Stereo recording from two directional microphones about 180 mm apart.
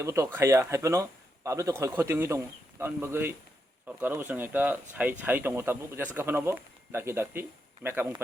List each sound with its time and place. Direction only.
0.0 s speech: 15° right (ahead or behind)